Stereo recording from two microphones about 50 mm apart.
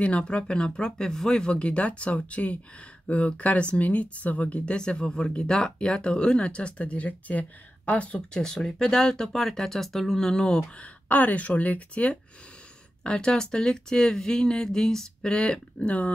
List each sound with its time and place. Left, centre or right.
0.0 s speech: left
8.4 s speech: centre
10.8 s speech: left
13.0 s speech: centre